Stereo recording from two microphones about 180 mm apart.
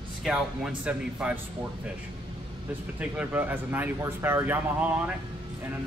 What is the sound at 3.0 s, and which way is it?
Speech, 10° right (ahead or behind).